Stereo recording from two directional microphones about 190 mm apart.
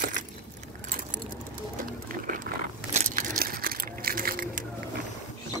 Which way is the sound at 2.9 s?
40° right (ahead or behind).